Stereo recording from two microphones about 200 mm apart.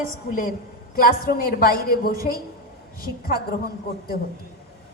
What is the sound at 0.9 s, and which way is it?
A woman's voice, 45° left (ahead or behind).